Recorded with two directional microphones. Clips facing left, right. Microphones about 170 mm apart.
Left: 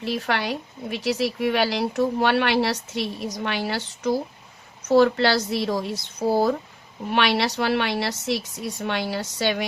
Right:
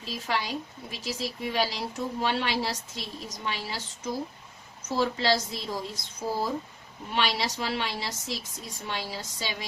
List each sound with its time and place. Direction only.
0.0 s a woman's voice: 70° left (ahead or behind)